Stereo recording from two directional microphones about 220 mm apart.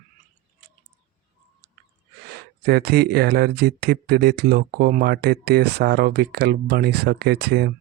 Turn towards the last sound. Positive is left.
turn(degrees=-45)  # may be behind; listen again after turning